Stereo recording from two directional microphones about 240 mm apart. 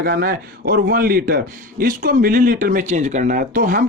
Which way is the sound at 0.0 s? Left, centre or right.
Right.